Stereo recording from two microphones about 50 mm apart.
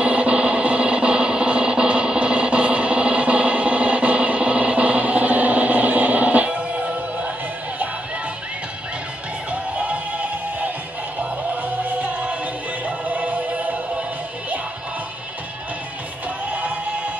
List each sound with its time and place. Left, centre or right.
0.0 s music: right
9.5 s music: right
11.7 s music: right
16.4 s music: right